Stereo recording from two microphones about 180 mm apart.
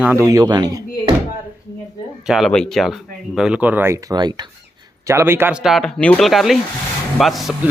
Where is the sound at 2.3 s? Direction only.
Centre (ahead or behind).